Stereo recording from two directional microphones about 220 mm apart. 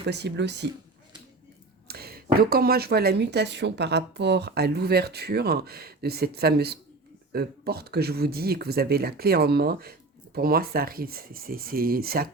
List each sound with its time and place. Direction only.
0.0 s speech: 50° right (ahead or behind)
1.9 s speech: 45° right (ahead or behind)